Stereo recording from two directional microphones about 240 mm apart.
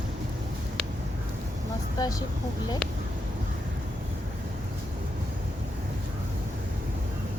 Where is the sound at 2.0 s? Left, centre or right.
Centre.